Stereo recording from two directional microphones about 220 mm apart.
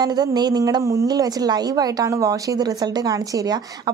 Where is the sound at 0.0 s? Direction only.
20° right (ahead or behind).